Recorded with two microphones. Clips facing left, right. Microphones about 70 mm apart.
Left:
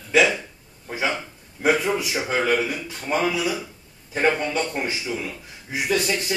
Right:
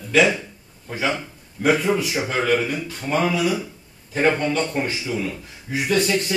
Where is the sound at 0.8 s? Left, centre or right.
Centre.